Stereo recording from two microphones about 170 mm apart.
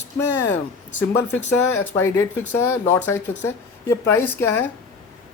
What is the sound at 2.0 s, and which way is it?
Speech, 15° left (ahead or behind).